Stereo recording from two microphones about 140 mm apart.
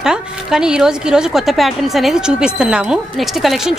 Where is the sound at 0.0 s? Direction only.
5° right (ahead or behind).